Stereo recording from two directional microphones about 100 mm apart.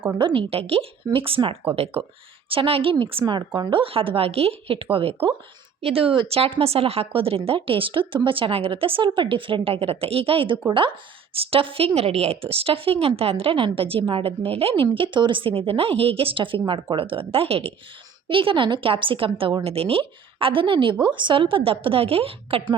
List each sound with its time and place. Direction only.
0.2 s speech: 55° right (ahead or behind)
1.1 s speech: 65° right (ahead or behind)
1.7 s speech: 75° right (ahead or behind)
11.9 s speech: 90° right; by 17.7 s 70° right (ahead or behind)
18.3 s speech: 60° right (ahead or behind)